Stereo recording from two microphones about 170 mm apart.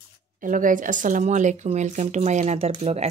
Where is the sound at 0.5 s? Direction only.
50° right (ahead or behind).